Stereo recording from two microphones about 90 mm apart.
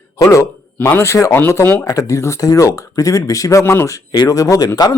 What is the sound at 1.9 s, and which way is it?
Speech, 35° left (ahead or behind).